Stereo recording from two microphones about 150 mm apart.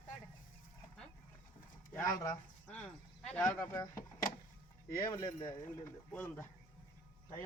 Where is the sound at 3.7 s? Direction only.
20° left (ahead or behind).